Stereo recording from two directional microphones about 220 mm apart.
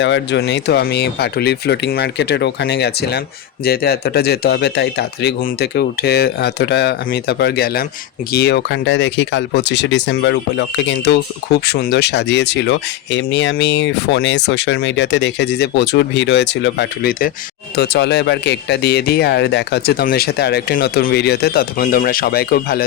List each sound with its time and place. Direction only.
0.0 s speech: 55° left (ahead or behind)